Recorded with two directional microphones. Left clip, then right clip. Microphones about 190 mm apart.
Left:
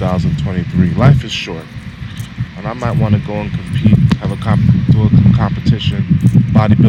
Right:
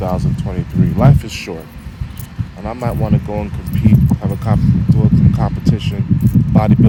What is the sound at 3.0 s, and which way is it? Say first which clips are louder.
Speech: left 1 dB; 5° right (ahead or behind).